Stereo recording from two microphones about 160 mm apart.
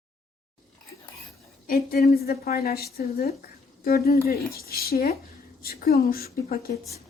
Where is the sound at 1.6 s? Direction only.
70° left (ahead or behind).